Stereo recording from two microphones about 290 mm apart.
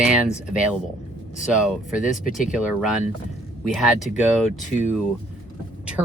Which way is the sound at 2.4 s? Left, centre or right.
Centre.